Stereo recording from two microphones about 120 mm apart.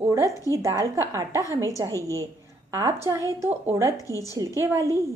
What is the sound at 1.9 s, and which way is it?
Speech, 25° left (ahead or behind).